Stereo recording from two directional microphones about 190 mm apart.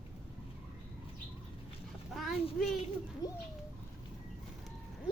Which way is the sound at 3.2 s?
20° left (ahead or behind).